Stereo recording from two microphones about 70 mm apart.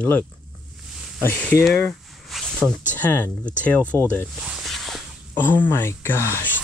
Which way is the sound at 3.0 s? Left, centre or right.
Left.